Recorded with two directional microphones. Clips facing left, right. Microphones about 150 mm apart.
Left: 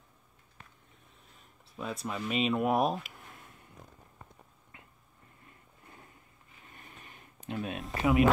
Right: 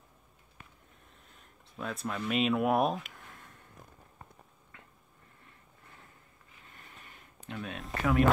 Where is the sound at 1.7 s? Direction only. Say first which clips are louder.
Even; 5° left (ahead or behind).